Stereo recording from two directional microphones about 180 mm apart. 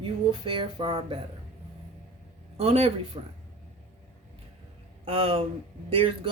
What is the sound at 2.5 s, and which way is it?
Speech, 35° right (ahead or behind).